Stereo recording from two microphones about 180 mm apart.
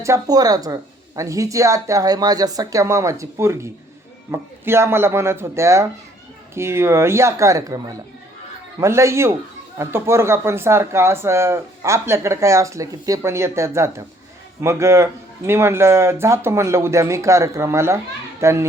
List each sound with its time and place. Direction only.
0.0 s speech: 20° right (ahead or behind)